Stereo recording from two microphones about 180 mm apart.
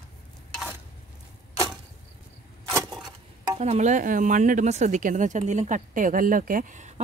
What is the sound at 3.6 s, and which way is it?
Speech, 40° right (ahead or behind).